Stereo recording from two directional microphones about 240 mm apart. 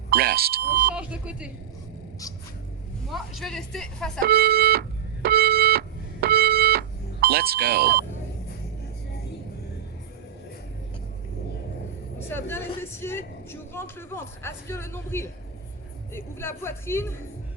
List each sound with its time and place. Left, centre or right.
0.1 s speech: right
0.9 s speech: centre
3.1 s speech: centre
4.2 s music: right
12.3 s a woman's voice: centre